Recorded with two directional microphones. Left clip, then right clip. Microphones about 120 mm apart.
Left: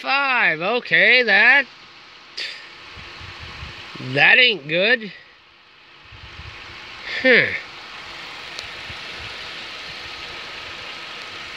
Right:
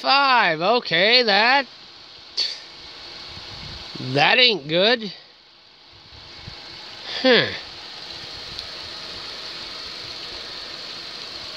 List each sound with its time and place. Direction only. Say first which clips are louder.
0.0 s speech: right 2 dB; 30° right (ahead or behind)
4.1 s speech: left 2 dB; 30° right (ahead or behind)
7.1 s speech: left 2 dB; 25° right (ahead or behind)